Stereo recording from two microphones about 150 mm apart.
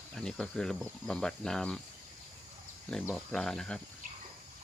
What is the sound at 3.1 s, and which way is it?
Speech, 5° left (ahead or behind).